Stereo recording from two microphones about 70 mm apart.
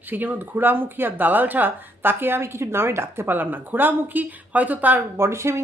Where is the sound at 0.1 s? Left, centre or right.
Right.